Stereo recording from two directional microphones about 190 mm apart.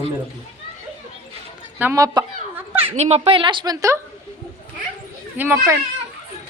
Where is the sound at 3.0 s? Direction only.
35° right (ahead or behind); by 4.0 s 15° right (ahead or behind).